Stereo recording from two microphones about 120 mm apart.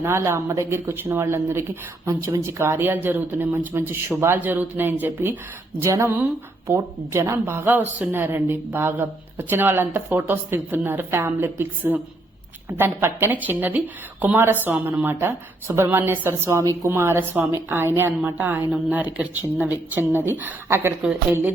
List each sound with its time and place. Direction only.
0.0 s a woman's voice: 20° right (ahead or behind)